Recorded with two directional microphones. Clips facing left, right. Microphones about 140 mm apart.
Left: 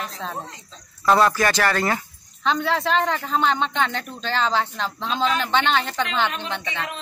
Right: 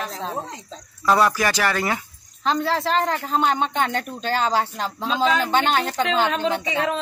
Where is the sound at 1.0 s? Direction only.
10° right (ahead or behind).